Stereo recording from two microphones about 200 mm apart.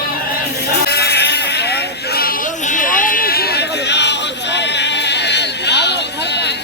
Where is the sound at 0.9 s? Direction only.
55° left (ahead or behind).